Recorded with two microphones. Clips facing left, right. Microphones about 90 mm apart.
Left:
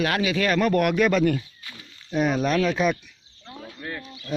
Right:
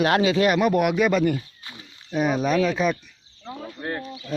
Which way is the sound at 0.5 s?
10° right (ahead or behind).